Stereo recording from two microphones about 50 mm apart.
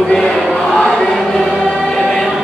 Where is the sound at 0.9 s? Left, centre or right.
Centre.